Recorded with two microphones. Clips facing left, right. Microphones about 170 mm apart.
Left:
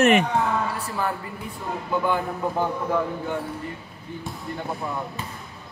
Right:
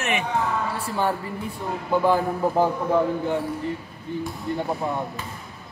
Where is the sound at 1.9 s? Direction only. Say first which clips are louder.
Right 4 dB; 30° right (ahead or behind).